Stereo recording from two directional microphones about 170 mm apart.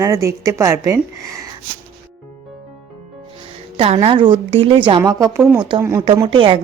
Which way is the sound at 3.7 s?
35° right (ahead or behind).